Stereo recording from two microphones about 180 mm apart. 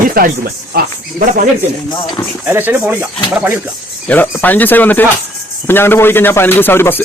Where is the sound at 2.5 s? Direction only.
10° right (ahead or behind).